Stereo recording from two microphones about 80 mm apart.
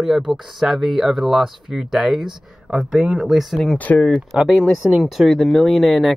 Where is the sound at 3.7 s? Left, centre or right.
Centre.